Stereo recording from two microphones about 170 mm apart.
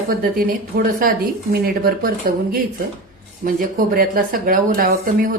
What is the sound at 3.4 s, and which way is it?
Speech, 55° right (ahead or behind).